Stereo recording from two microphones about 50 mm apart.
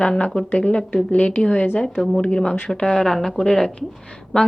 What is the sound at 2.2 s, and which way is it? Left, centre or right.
Speech, centre.